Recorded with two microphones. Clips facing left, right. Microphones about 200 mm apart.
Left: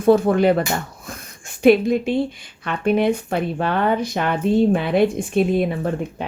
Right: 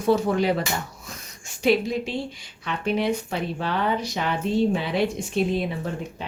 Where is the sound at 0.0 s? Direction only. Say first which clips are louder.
Left 6 dB; 55° left (ahead or behind).